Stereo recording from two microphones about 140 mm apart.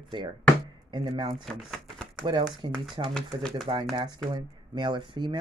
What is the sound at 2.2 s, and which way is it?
Speech, 35° right (ahead or behind).